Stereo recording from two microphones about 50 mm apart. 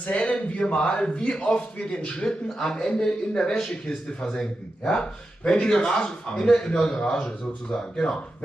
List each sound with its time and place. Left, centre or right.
0.0 s a man's voice: left